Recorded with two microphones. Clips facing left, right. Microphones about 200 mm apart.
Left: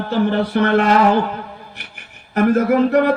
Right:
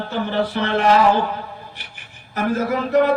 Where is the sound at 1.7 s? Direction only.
60° left (ahead or behind).